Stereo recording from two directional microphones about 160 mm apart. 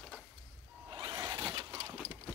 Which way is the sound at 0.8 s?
25° right (ahead or behind).